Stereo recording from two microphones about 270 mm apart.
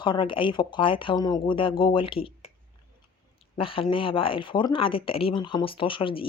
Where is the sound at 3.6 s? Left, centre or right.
Centre.